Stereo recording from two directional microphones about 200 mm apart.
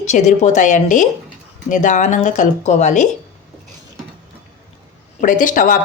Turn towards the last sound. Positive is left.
turn(degrees=40)  # may be behind; listen again after turning